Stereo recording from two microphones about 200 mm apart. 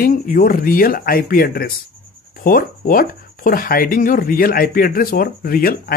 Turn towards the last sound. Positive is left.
turn(degrees=50)  # may be behind; listen again after turning